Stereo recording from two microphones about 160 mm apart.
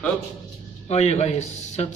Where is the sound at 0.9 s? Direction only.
40° left (ahead or behind).